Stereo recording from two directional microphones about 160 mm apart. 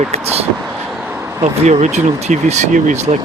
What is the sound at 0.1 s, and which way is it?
Speech, 40° right (ahead or behind).